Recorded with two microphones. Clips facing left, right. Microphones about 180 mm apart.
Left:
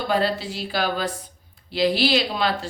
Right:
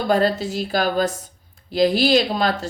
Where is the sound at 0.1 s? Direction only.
45° right (ahead or behind).